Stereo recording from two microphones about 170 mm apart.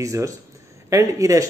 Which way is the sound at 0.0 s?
20° right (ahead or behind).